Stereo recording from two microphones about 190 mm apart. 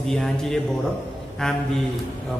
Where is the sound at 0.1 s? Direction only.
Centre (ahead or behind).